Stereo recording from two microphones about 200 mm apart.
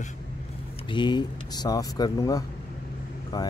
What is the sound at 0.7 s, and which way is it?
Speech, 25° left (ahead or behind).